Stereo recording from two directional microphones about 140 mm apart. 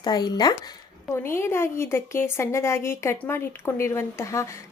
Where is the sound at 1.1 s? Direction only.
20° left (ahead or behind).